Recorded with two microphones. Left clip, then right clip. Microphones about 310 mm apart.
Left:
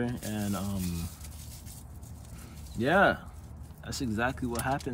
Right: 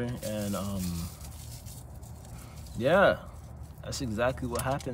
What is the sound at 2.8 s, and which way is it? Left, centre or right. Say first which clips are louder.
Speech: right 1 dB; centre.